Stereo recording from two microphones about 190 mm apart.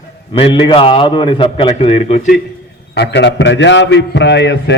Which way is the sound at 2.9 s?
65° left (ahead or behind).